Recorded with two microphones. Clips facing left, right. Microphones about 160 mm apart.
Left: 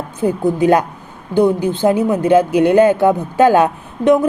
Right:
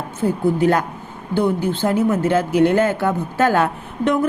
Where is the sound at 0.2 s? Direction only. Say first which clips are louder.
Left 2 dB; 15° left (ahead or behind).